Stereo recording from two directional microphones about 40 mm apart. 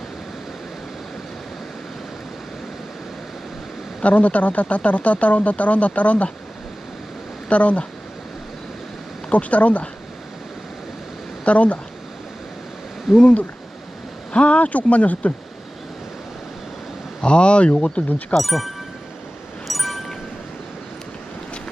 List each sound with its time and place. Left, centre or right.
4.0 s speech: left
7.5 s speech: left
9.3 s speech: left
11.4 s speech: left
13.1 s speech: left
17.2 s speech: left
18.3 s speech: centre
19.6 s a sound: centre